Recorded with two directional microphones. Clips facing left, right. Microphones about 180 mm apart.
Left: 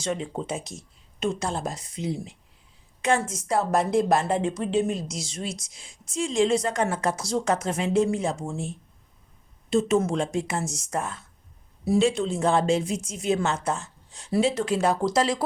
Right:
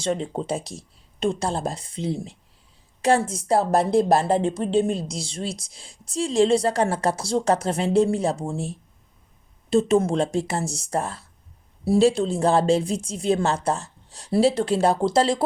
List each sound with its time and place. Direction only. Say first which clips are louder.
0.0 s a woman's voice: right 4 dB; 35° right (ahead or behind)